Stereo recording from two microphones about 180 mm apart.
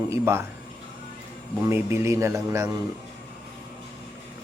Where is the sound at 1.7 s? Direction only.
15° right (ahead or behind).